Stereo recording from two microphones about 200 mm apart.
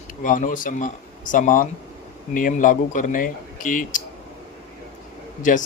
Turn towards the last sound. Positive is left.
turn(degrees=40)  # may be behind; listen again after turning